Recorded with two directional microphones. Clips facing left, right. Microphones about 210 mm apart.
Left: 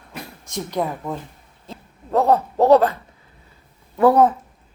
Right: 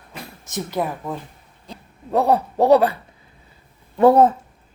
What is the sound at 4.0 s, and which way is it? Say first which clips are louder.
Speech: right 1 dB; 25° right (ahead or behind).